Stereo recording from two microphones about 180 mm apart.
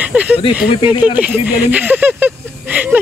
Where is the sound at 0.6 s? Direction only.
30° left (ahead or behind).